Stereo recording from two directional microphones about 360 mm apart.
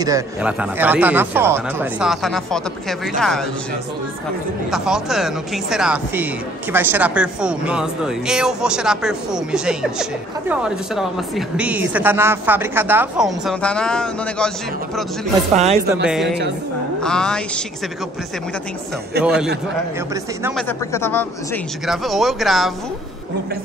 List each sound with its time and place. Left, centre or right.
0.0 s a woman's voice: centre
4.6 s a woman's voice: centre
15.5 s a woman's voice: centre
16.1 s a woman's voice: centre
19.2 s a woman's voice: centre